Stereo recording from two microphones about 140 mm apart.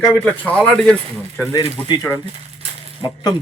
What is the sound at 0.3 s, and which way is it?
Speech, 10° left (ahead or behind).